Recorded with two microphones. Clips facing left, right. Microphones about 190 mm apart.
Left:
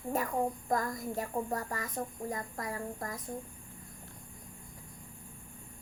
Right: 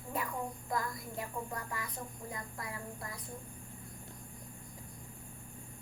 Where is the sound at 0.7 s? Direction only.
45° left (ahead or behind).